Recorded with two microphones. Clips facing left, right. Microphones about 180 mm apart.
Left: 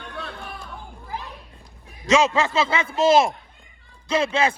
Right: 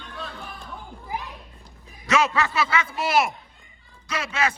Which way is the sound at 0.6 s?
15° right (ahead or behind).